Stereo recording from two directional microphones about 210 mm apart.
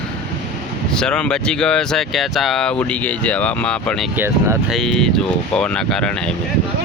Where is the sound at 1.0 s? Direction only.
5° left (ahead or behind).